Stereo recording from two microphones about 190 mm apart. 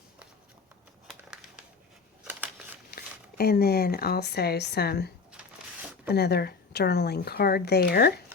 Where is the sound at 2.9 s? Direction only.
55° left (ahead or behind).